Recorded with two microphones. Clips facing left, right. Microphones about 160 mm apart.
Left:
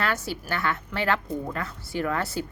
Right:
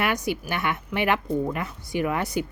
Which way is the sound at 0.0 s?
20° right (ahead or behind).